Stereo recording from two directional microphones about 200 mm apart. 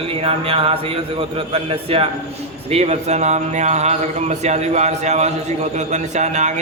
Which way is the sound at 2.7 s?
30° right (ahead or behind).